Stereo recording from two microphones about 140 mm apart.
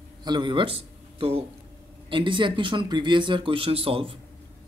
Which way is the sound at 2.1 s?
35° right (ahead or behind).